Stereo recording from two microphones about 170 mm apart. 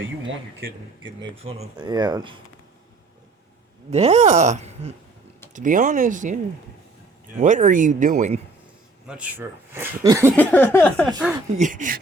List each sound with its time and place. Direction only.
0.0 s a man's voice: 90° right
1.0 s speech: 30° right (ahead or behind)
3.9 s speech: 40° right (ahead or behind)
5.5 s speech: 50° right (ahead or behind)
9.0 s speech: 10° right (ahead or behind)
10.5 s speech: 10° left (ahead or behind)
11.5 s speech: 45° right (ahead or behind)